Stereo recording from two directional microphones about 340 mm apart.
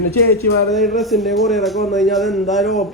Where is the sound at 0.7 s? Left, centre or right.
Centre.